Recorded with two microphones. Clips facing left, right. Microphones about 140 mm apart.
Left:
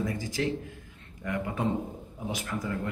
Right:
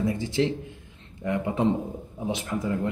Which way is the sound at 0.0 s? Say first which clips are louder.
Right 5 dB; 25° right (ahead or behind).